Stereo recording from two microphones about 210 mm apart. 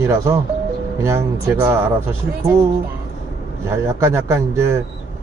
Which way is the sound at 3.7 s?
10° right (ahead or behind).